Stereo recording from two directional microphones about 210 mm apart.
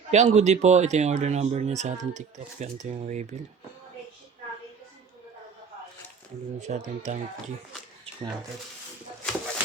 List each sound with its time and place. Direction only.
0.1 s speech: 30° right (ahead or behind)
6.6 s speech: 35° right (ahead or behind)